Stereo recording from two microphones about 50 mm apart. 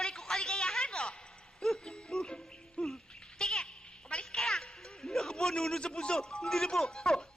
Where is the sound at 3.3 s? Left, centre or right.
Centre.